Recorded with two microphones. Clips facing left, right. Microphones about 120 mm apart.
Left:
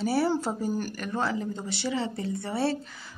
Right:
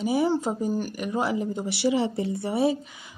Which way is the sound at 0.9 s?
15° right (ahead or behind).